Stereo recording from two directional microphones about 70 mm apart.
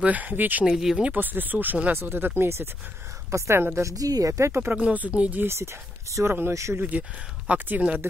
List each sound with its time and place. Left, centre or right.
0.0 s speech: right
0.7 s speech: centre
1.1 s speech: right
3.9 s speech: right
4.7 s speech: right
5.4 s speech: right
6.8 s speech: right